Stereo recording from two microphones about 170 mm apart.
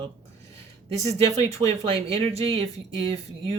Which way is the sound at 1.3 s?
35° right (ahead or behind).